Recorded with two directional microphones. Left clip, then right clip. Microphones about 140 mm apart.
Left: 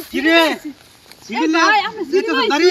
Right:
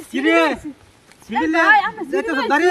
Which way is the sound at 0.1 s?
20° right (ahead or behind).